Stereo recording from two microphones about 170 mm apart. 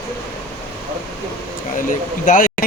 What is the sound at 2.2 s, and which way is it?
Speech, 50° left (ahead or behind).